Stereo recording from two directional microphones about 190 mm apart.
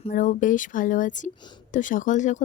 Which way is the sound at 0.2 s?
45° left (ahead or behind).